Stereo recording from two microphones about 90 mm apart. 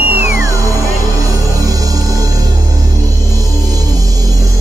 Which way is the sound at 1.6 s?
40° right (ahead or behind).